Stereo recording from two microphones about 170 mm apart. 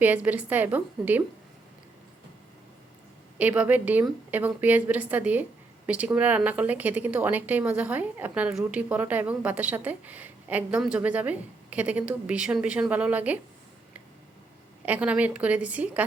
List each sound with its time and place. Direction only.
0.0 s a woman's voice: 10° right (ahead or behind)
3.3 s a woman's voice: 10° right (ahead or behind)
14.8 s a woman's voice: 10° right (ahead or behind)